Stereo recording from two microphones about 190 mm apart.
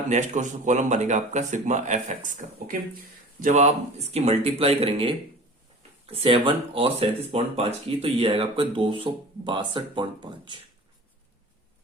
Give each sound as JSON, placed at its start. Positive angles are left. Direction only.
{"t": 0.1, "sound": "speech", "side_deg": -40}